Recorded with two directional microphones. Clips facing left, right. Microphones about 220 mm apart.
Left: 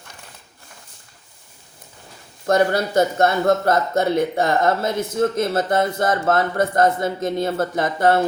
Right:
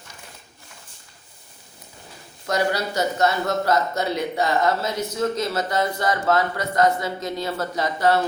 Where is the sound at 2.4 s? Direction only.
50° left (ahead or behind).